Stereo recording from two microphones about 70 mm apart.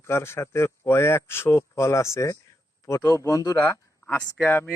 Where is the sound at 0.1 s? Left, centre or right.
Left.